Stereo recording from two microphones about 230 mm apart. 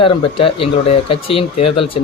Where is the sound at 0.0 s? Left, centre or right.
Left.